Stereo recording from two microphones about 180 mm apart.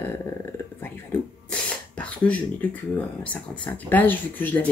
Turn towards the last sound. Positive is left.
turn(degrees=10)  # may be behind; listen again after turning